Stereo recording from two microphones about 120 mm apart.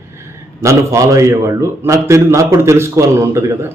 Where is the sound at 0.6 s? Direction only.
25° right (ahead or behind).